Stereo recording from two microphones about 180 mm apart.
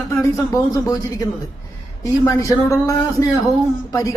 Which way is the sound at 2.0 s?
20° left (ahead or behind).